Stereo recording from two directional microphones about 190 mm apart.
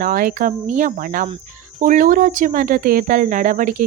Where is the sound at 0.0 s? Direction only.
45° right (ahead or behind).